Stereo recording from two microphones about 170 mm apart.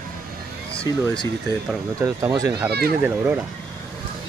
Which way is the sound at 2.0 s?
20° right (ahead or behind).